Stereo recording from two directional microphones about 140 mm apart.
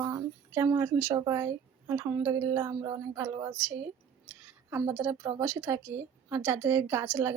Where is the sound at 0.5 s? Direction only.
20° right (ahead or behind).